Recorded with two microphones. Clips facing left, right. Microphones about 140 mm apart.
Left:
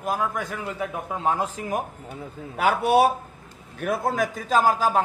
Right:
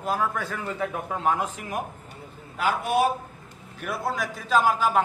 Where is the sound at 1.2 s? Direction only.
30° left (ahead or behind).